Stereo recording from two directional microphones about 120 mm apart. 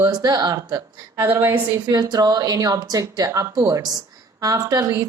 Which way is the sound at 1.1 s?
20° right (ahead or behind).